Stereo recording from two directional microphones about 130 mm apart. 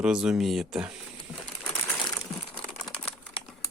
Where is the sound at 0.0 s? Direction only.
5° right (ahead or behind).